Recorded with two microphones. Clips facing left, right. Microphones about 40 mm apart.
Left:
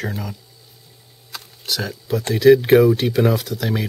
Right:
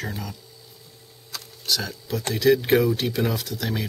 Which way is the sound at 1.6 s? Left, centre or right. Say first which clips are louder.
Left 2 dB; centre.